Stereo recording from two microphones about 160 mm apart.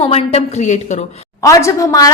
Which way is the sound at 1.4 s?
20° left (ahead or behind).